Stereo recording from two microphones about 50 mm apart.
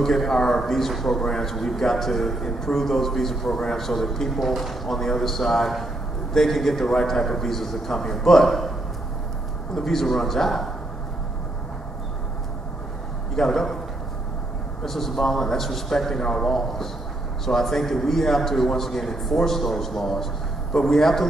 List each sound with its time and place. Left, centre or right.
0.0 s a man's voice: centre
9.8 s a man's voice: centre
13.4 s a man's voice: centre
14.9 s a man's voice: centre